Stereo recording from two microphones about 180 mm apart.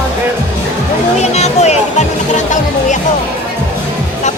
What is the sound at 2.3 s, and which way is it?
Music, 45° left (ahead or behind).